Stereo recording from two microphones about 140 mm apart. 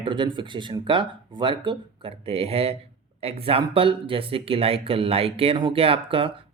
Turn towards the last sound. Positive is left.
turn(degrees=-40)  # may be behind; listen again after turning